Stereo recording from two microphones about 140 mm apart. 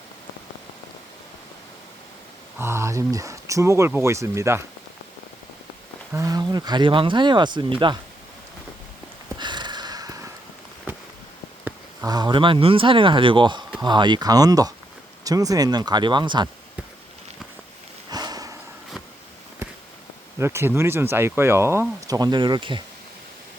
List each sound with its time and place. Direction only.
2.6 s speech: 20° right (ahead or behind)
6.1 s speech: 25° right (ahead or behind)
9.4 s sniff: 35° right (ahead or behind)
10.9 s a sound: 15° right (ahead or behind)
12.0 s speech: 30° right (ahead or behind)
18.1 s a sound: 30° right (ahead or behind)
20.4 s speech: 20° right (ahead or behind); by 22.8 s 35° right (ahead or behind)